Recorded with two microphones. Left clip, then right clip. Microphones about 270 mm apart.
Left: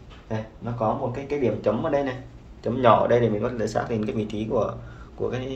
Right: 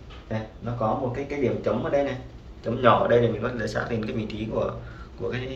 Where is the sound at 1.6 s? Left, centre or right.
Left.